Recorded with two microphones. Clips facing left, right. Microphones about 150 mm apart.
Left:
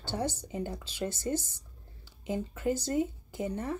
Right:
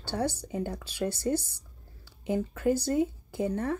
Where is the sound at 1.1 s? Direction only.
15° right (ahead or behind).